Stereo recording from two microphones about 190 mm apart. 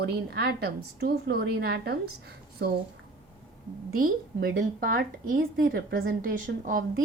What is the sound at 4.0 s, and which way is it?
Speech, 50° right (ahead or behind).